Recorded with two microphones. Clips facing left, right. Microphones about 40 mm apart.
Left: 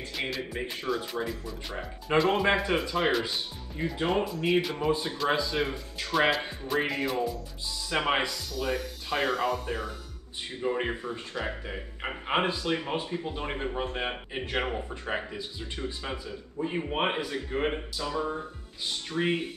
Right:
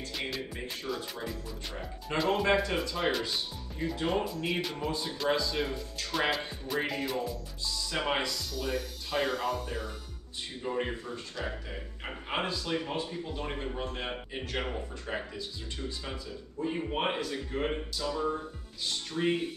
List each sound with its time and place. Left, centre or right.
0.1 s speech: centre
0.5 s speech: centre
3.0 s speech: centre
4.2 s speech: centre
4.7 s speech: left
7.9 s speech: left
8.5 s speech: centre
10.6 s speech: left